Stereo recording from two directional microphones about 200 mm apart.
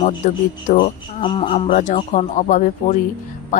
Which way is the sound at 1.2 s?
25° left (ahead or behind).